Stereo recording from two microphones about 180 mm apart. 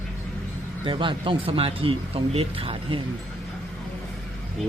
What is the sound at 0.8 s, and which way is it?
Speech, 30° right (ahead or behind).